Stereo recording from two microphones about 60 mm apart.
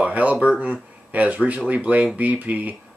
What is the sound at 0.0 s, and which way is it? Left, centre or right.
Speech, right.